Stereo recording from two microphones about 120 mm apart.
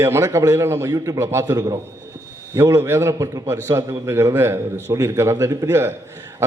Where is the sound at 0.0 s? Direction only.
25° right (ahead or behind).